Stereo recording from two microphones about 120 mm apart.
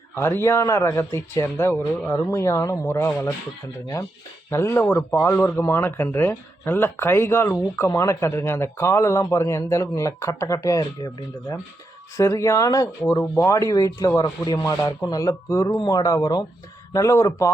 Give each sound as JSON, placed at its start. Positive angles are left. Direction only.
{"t": 0.2, "sound": "speech", "side_deg": 20}
{"t": 4.5, "sound": "speech", "side_deg": 20}